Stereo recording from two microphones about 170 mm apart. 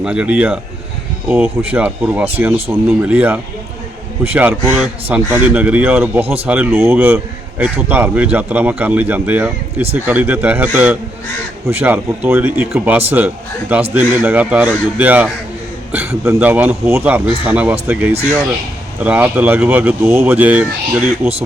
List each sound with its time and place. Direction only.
0.0 s speech: 5° right (ahead or behind)